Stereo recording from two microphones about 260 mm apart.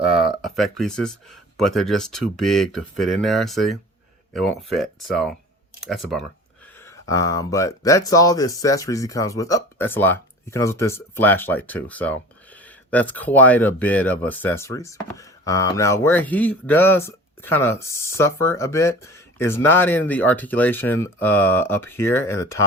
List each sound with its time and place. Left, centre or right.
0.4 s speech: centre
7.0 s speech: centre